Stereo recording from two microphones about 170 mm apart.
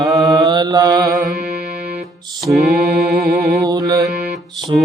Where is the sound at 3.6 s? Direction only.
20° right (ahead or behind).